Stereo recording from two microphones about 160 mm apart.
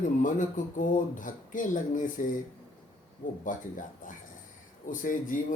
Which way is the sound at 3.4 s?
55° left (ahead or behind).